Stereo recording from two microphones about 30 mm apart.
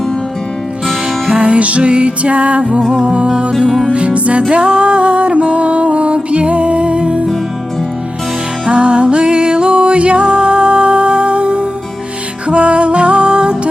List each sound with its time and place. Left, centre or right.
1.3 s music: right
1.8 s music: right
3.1 s music: right
3.9 s music: right
8.6 s music: right